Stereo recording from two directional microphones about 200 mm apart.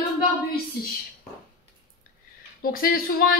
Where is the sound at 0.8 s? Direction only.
50° left (ahead or behind).